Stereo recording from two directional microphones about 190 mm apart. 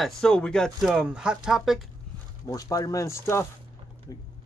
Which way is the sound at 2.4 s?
15° left (ahead or behind).